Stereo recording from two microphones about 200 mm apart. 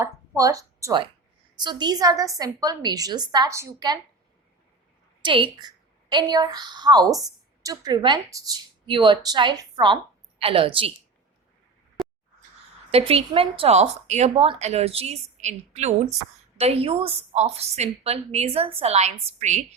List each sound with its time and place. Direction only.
0.0 s a woman's voice: 15° right (ahead or behind)
5.2 s a woman's voice: 25° right (ahead or behind)
12.9 s a woman's voice: 30° right (ahead or behind)